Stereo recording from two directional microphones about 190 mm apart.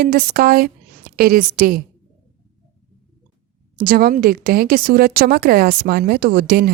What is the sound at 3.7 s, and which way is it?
A woman's voice, 50° right (ahead or behind).